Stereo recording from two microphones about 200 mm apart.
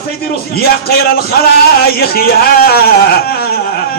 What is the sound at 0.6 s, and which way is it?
Speech, 50° left (ahead or behind).